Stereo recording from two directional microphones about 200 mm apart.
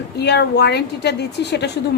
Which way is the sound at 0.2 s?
55° left (ahead or behind).